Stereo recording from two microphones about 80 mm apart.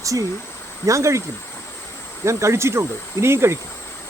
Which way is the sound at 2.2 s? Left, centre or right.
Right.